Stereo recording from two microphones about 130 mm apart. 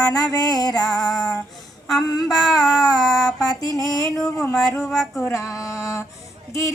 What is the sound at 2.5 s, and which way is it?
Female singing, 30° left (ahead or behind).